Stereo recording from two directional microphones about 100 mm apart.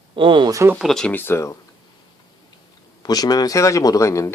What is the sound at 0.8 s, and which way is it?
Speech, 5° left (ahead or behind).